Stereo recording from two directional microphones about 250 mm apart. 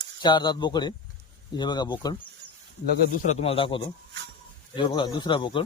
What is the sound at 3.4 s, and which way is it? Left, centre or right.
Speech, left.